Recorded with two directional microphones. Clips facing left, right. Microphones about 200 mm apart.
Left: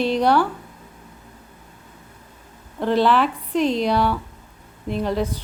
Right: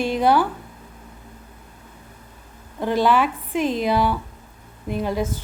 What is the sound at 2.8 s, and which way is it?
A woman's voice, centre (ahead or behind).